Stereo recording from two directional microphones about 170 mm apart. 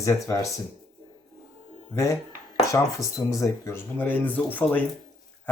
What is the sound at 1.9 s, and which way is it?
Speech, 20° left (ahead or behind).